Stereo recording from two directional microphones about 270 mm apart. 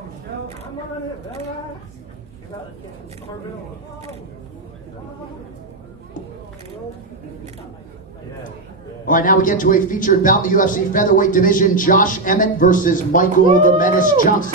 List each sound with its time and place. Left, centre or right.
9.0 s a man's voice: left